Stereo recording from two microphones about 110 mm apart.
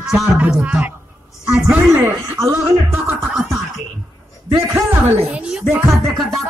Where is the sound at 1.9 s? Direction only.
25° right (ahead or behind).